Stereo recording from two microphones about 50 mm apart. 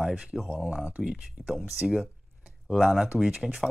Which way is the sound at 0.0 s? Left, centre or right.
Centre.